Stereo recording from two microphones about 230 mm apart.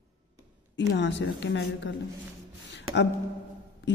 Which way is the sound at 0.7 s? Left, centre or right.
Left.